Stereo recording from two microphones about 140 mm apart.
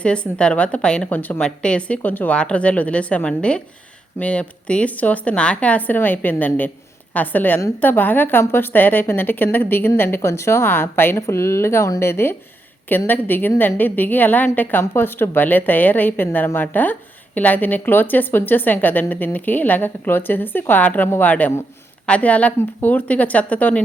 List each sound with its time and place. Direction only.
0.0 s a woman's voice: 5° left (ahead or behind)